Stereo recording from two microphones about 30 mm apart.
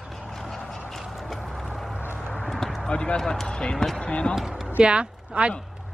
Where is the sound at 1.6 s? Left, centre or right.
Centre.